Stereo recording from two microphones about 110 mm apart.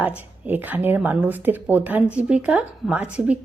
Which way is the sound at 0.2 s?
15° right (ahead or behind).